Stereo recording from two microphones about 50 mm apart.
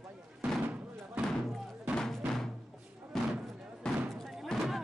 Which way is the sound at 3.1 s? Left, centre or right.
Centre.